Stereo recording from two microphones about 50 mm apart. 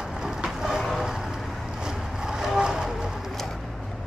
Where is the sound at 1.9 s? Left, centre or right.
Centre.